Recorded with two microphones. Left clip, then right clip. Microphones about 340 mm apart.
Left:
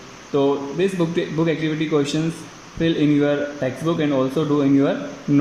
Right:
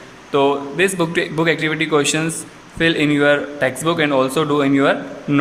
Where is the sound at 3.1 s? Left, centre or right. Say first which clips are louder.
Right 5 dB; right.